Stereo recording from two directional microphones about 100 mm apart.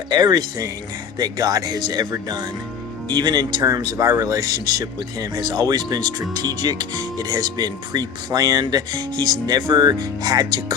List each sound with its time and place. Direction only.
0.1 s speech: 45° right (ahead or behind)